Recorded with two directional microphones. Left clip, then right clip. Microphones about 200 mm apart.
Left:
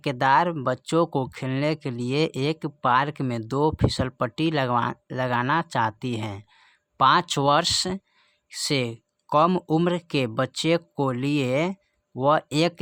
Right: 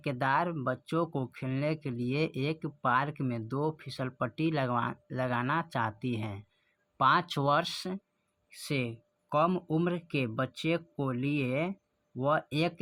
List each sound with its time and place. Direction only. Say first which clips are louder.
0.0 s speech: left 9 dB; 35° left (ahead or behind)